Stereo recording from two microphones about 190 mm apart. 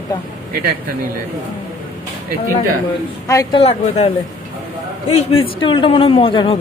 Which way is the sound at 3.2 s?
20° left (ahead or behind).